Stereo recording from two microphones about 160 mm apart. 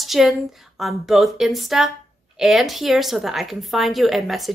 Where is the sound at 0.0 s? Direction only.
Centre (ahead or behind).